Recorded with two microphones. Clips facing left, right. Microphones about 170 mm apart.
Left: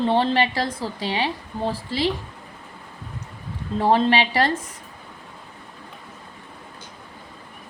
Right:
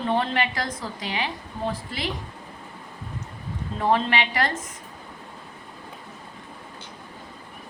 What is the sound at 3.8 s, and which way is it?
Speech, 30° left (ahead or behind).